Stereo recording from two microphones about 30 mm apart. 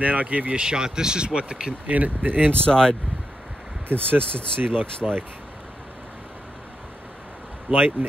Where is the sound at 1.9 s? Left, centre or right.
Right.